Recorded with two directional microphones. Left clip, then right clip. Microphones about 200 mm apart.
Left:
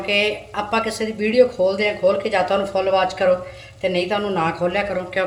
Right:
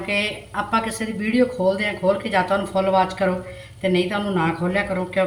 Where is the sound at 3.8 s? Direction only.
60° left (ahead or behind).